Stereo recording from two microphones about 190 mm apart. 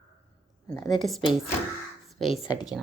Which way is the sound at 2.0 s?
Centre (ahead or behind).